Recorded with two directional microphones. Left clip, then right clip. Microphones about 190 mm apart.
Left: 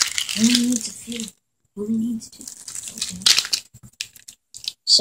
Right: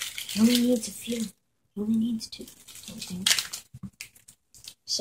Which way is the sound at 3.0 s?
45° left (ahead or behind).